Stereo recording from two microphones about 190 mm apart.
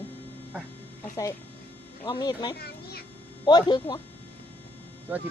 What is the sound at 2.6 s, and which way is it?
Speech, 55° left (ahead or behind).